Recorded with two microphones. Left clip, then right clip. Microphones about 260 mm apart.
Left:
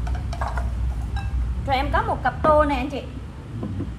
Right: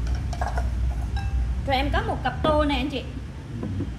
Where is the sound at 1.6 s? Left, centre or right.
Centre.